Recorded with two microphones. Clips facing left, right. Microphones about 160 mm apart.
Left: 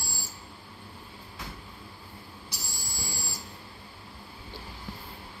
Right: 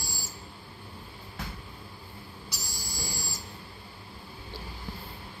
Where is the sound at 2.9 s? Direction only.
30° left (ahead or behind).